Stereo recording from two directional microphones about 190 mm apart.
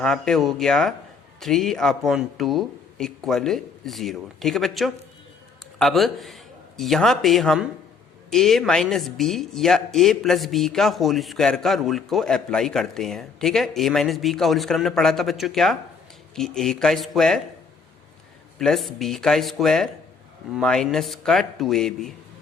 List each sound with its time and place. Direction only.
0.0 s a man's voice: centre (ahead or behind)
18.6 s speech: centre (ahead or behind)